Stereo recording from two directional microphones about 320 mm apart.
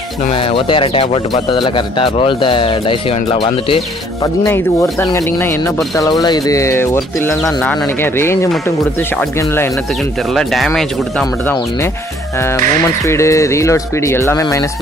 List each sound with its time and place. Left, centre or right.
0.2 s speech: centre
13.0 s speech: centre